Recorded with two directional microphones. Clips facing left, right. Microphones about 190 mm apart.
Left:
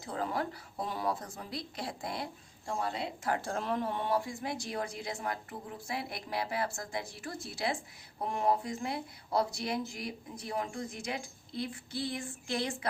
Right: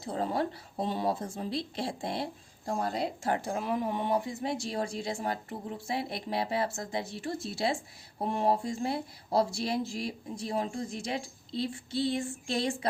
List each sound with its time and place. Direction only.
0.0 s speech: 30° right (ahead or behind)
2.6 s a woman's voice: 40° right (ahead or behind)
3.2 s speech: 20° right (ahead or behind)